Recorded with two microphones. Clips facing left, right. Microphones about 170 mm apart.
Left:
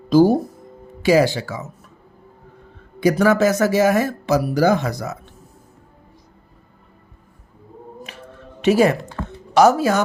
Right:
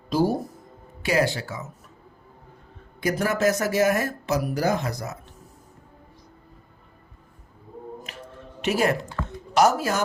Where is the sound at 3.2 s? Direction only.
90° left.